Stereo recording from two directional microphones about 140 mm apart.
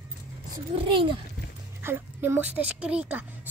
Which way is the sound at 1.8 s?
15° right (ahead or behind).